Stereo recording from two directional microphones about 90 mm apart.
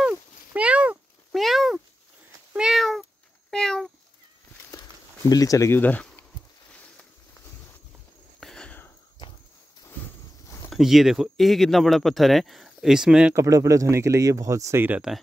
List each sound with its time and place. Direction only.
0.0 s a sound: 10° right (ahead or behind)
1.3 s speech: centre (ahead or behind)
2.5 s meow: 5° right (ahead or behind)
5.3 s speech: 40° left (ahead or behind)
5.7 s speech: 20° left (ahead or behind)
8.4 s a sound: 5° left (ahead or behind)
10.7 s speech: 5° right (ahead or behind)
13.3 s speech: 35° right (ahead or behind)
15.0 s speech: 5° right (ahead or behind)